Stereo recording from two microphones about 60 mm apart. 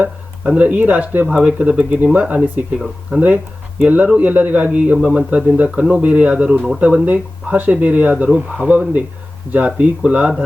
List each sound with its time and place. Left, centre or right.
0.0 s speech: right
2.7 s speech: centre
3.2 s speech: right